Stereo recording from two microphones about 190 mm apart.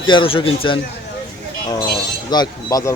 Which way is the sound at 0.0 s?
25° left (ahead or behind).